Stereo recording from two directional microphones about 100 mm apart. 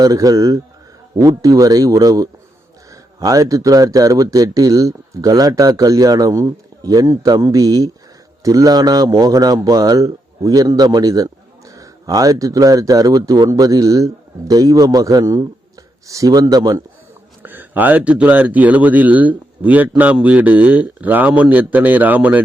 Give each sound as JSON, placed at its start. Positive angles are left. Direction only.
{"t": 0.0, "sound": "a man's voice", "side_deg": -35}
{"t": 17.4, "sound": "speech", "side_deg": -20}